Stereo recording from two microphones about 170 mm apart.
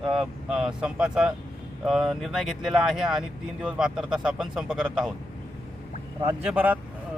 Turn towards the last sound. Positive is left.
turn(degrees=-10)  # may be behind; listen again after turning